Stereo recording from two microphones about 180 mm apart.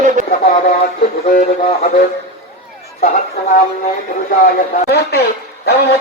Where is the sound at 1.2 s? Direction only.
50° left (ahead or behind).